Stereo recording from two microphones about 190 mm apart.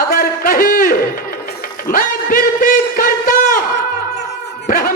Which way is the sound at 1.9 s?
45° left (ahead or behind).